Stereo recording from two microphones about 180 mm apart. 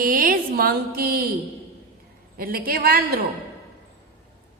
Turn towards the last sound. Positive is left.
turn(degrees=-55)  # may be behind; listen again after turning